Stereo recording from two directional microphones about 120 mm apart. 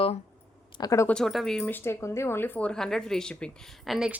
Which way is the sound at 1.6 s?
20° left (ahead or behind).